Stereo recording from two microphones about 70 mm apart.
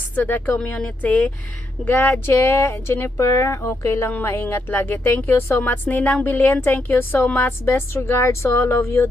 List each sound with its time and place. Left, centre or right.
0.2 s a woman's voice: left
5.7 s a woman's voice: left